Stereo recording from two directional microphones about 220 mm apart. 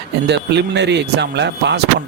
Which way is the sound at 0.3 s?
50° right (ahead or behind).